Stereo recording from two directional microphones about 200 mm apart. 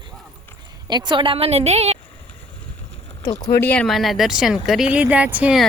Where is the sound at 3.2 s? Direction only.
15° left (ahead or behind); by 5.7 s 5° right (ahead or behind).